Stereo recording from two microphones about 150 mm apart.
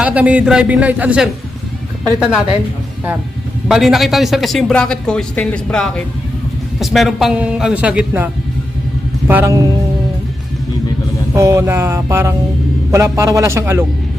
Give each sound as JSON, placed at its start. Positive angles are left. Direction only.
{"t": 0.0, "sound": "speech", "side_deg": -10}
{"t": 3.7, "sound": "a man's voice", "side_deg": 0}
{"t": 11.3, "sound": "a man's voice", "side_deg": -20}